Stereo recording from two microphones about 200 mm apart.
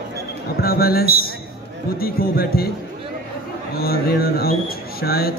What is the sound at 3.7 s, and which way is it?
A man's voice, 50° left (ahead or behind).